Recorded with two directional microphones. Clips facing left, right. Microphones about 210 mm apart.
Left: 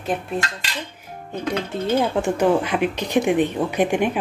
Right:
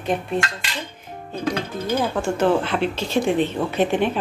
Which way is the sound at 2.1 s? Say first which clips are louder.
Left 1 dB; 15° left (ahead or behind).